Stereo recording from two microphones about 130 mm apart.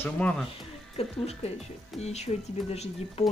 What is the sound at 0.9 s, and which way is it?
Speech, 55° left (ahead or behind).